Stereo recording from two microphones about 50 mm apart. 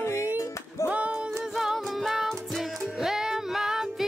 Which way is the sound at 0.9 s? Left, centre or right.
Right.